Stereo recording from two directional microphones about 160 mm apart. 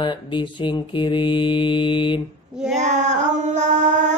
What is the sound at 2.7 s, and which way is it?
Female singing, 45° right (ahead or behind).